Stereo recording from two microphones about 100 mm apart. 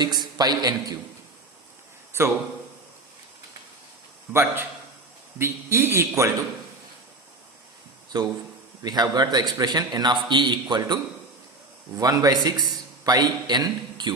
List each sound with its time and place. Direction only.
0.0 s a man's voice: 45° right (ahead or behind)
2.1 s a man's voice: 25° right (ahead or behind)
4.3 s a man's voice: 25° right (ahead or behind)
8.8 s a man's voice: 45° right (ahead or behind)